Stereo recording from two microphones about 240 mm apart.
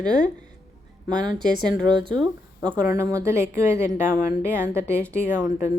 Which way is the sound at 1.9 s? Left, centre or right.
Centre.